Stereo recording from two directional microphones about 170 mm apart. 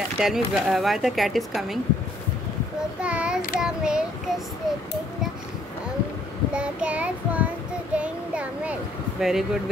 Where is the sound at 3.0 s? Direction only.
5° right (ahead or behind).